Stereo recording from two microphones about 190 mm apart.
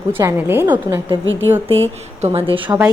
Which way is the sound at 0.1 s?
10° right (ahead or behind).